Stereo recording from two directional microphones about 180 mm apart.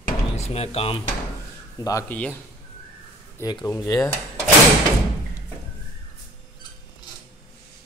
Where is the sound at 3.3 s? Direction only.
20° left (ahead or behind).